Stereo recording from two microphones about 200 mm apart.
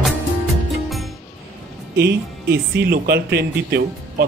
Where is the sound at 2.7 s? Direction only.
50° right (ahead or behind).